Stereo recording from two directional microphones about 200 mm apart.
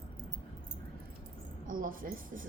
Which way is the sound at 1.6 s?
45° right (ahead or behind).